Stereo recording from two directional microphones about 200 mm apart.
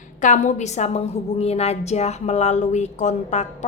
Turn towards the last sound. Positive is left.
turn(degrees=35)  # may be behind; listen again after turning